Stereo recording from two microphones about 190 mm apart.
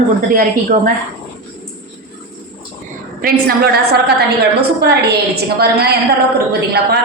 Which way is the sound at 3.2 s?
55° right (ahead or behind).